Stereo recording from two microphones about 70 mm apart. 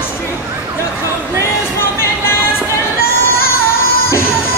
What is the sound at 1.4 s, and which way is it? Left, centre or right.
Music, left.